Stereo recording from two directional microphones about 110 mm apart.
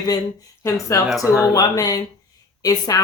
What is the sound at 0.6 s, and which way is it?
Speech, 25° left (ahead or behind).